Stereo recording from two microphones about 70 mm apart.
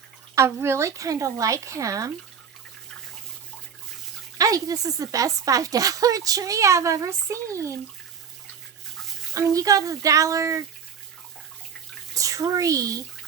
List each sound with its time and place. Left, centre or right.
0.3 s speech: right
4.4 s speech: right
9.3 s speech: right
12.1 s speech: right